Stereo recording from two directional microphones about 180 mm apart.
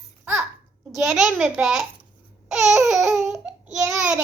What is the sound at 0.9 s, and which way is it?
Speech, centre (ahead or behind).